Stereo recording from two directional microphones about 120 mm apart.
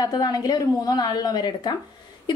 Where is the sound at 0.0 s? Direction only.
30° left (ahead or behind).